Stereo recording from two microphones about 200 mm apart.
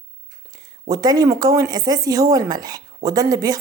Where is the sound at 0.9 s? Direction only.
20° right (ahead or behind).